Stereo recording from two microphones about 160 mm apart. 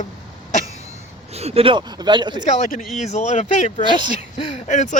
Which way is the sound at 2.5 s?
50° left (ahead or behind).